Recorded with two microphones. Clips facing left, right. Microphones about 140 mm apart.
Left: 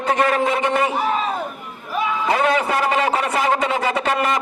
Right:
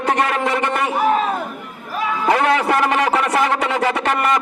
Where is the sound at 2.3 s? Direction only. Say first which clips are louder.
Right 1 dB; 65° right (ahead or behind).